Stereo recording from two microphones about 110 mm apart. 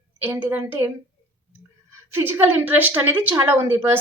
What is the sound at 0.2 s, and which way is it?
Speech, 15° right (ahead or behind).